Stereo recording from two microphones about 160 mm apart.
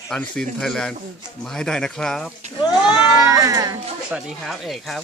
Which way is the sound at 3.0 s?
20° right (ahead or behind).